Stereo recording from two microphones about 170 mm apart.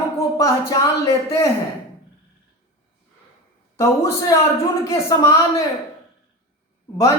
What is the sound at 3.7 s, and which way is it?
Speech, 20° left (ahead or behind).